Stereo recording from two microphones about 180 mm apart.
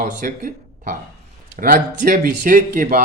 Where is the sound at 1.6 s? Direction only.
50° right (ahead or behind).